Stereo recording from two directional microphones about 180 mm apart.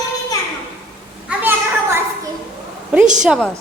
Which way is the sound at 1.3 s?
10° right (ahead or behind).